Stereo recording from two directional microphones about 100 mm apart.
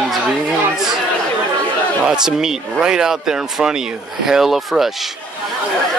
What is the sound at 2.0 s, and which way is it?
Speech, 5° right (ahead or behind).